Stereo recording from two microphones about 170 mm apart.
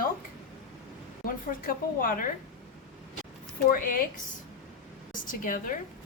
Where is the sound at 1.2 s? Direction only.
55° left (ahead or behind).